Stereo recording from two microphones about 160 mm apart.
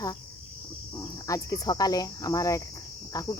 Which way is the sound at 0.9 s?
20° left (ahead or behind).